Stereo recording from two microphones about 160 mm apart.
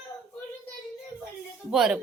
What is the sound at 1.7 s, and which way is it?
Speech, 5° right (ahead or behind).